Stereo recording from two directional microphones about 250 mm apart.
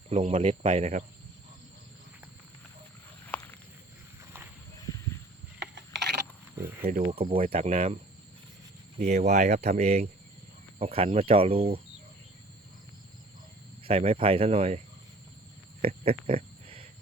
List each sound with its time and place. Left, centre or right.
0.1 s speech: right
3.2 s walk: centre
5.5 s a sound: right
7.0 s speech: right
9.0 s speech: right
13.8 s speech: right
15.8 s a sound: right